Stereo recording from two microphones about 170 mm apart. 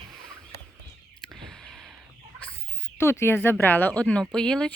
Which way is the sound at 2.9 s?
15° left (ahead or behind).